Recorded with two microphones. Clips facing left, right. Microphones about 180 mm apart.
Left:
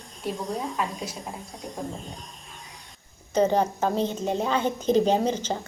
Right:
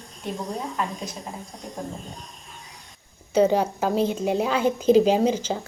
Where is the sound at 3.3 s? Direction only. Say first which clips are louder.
Right 2 dB; 10° right (ahead or behind).